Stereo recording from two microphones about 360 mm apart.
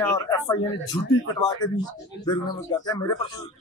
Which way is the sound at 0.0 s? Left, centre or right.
Centre.